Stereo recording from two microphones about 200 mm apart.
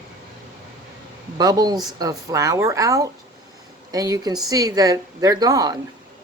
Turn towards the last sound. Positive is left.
turn(degrees=-20)  # may be behind; listen again after turning